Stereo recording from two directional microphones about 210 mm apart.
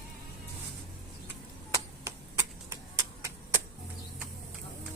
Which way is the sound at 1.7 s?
15° right (ahead or behind).